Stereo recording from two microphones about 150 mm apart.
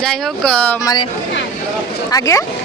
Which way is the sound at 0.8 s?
25° left (ahead or behind).